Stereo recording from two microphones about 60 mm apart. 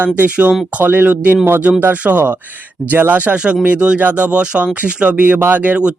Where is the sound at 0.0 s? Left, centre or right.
Right.